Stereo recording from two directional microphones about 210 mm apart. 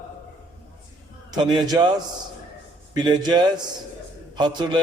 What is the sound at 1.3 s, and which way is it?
A man's voice, 20° right (ahead or behind).